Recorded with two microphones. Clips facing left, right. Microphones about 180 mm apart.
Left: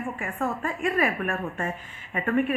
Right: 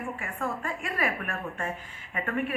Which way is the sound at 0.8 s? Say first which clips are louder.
Left 8 dB; 25° left (ahead or behind).